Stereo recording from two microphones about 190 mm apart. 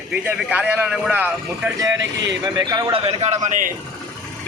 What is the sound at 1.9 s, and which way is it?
Speech, 70° right (ahead or behind).